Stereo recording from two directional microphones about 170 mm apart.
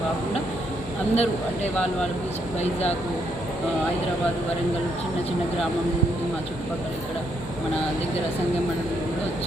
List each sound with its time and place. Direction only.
1.1 s speech: 40° left (ahead or behind)
1.7 s speech: 10° left (ahead or behind)